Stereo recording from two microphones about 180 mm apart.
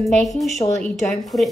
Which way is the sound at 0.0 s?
Centre (ahead or behind).